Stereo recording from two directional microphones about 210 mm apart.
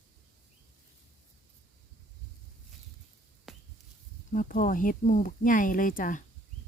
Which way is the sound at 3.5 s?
Centre (ahead or behind).